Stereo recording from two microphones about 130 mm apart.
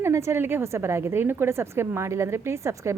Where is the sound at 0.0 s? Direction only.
20° right (ahead or behind).